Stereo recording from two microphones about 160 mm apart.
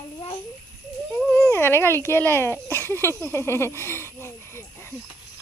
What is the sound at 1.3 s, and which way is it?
A child's voice, 15° left (ahead or behind).